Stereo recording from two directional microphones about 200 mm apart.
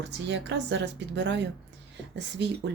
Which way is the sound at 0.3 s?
60° right (ahead or behind).